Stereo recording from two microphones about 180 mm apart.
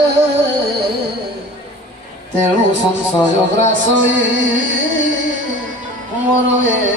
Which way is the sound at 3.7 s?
90° right.